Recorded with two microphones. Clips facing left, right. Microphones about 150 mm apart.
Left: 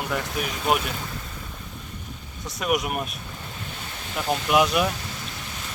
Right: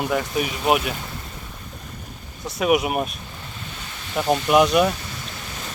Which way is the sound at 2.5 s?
Centre (ahead or behind).